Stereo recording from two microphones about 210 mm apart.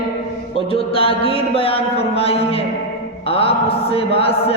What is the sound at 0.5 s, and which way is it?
Speech, 25° left (ahead or behind).